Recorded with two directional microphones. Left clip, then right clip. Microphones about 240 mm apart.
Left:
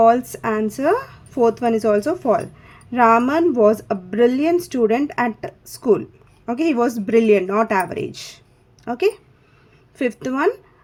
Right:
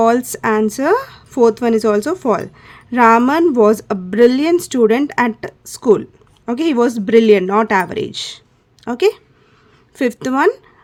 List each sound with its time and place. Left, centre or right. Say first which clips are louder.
0.0 s speech: right 1 dB; right